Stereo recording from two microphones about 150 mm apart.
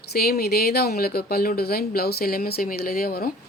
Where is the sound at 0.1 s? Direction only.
90° left.